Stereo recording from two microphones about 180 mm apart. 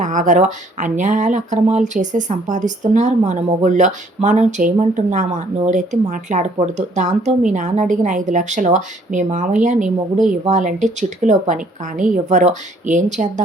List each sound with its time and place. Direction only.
0.0 s speech: 45° right (ahead or behind)